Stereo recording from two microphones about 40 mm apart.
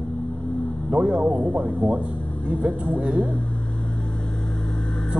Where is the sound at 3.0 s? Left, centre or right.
Right.